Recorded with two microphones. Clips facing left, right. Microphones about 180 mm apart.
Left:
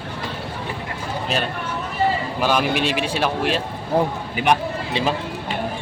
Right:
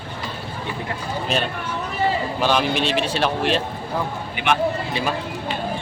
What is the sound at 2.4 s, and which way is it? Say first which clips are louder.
Speech: left 1 dB; 10° left (ahead or behind).